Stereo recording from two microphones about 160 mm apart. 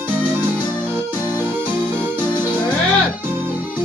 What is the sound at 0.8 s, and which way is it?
Keyboard, 15° right (ahead or behind).